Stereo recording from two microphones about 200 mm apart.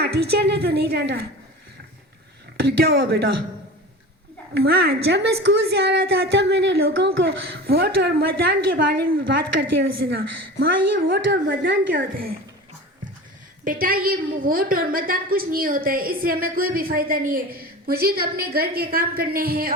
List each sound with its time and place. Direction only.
0.0 s a woman's voice: 55° right (ahead or behind)
2.6 s a woman's voice: 50° right (ahead or behind)
4.5 s a woman's voice: 50° right (ahead or behind)
13.7 s a woman's voice: 45° right (ahead or behind)